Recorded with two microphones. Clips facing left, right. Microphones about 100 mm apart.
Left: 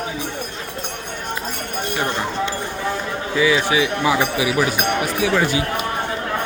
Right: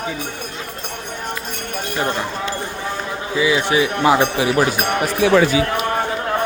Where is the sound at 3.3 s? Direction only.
15° right (ahead or behind).